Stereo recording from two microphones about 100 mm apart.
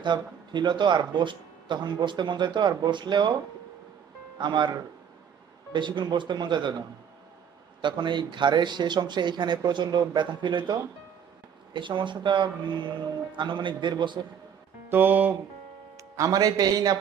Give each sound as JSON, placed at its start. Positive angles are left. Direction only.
{"t": 0.0, "sound": "speech", "side_deg": -50}
{"t": 4.4, "sound": "speech", "side_deg": -50}
{"t": 7.8, "sound": "speech", "side_deg": -50}
{"t": 14.9, "sound": "music", "side_deg": -20}
{"t": 16.2, "sound": "a man's voice", "side_deg": -40}